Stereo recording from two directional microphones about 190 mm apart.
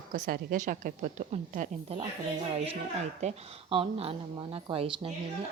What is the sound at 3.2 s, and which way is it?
Speech, 35° right (ahead or behind).